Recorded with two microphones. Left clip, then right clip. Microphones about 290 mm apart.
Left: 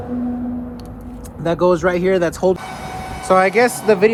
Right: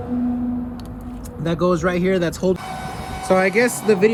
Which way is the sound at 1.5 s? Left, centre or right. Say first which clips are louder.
Left 4 dB; centre.